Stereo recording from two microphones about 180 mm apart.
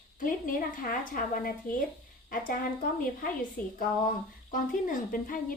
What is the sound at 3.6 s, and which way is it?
Speech, 10° left (ahead or behind).